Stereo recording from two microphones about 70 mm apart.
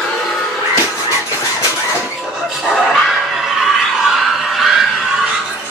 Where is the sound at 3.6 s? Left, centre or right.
Centre.